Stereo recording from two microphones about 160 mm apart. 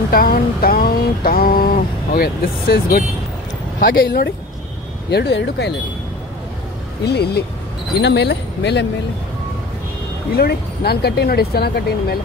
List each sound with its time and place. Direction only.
0.1 s a sound: 65° left (ahead or behind)
3.8 s speech: 80° left
5.1 s speech: 90° left
7.1 s speech: 90° left
10.3 s speech: 75° left (ahead or behind)